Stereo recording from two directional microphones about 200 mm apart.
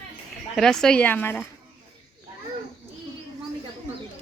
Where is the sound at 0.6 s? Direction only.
Centre (ahead or behind).